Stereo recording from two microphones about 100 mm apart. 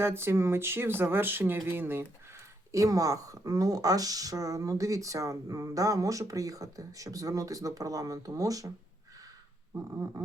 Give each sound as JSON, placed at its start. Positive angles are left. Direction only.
{"t": 0.0, "sound": "speech", "side_deg": -25}
{"t": 2.7, "sound": "speech", "side_deg": -35}
{"t": 9.7, "sound": "speech", "side_deg": -25}